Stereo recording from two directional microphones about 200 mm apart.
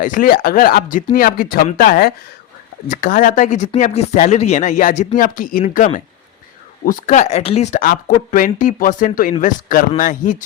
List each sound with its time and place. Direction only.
0.0 s speech: 40° left (ahead or behind)